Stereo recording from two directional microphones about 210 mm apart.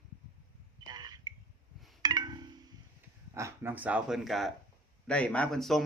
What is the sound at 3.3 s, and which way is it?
Speech, 10° right (ahead or behind).